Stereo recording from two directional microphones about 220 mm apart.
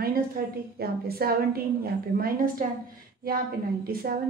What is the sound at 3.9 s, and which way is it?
Speech, 40° right (ahead or behind).